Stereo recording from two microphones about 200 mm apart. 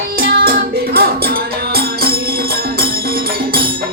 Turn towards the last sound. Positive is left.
turn(degrees=-50)  # may be behind; listen again after turning